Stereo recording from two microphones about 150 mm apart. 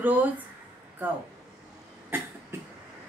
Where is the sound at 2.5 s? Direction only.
15° right (ahead or behind).